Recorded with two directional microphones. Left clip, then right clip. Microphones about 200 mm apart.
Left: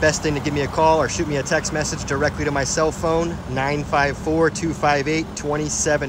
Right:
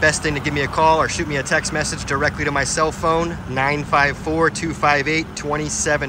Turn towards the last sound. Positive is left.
turn(degrees=15)  # may be behind; listen again after turning